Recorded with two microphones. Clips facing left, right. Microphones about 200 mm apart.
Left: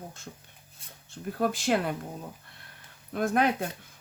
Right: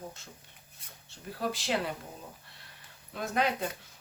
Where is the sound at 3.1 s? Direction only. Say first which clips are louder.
Left 5 dB; 55° left (ahead or behind).